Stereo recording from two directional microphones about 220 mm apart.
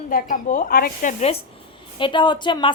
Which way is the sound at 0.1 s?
40° left (ahead or behind).